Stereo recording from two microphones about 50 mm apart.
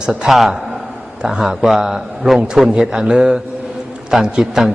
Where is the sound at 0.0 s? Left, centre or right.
Centre.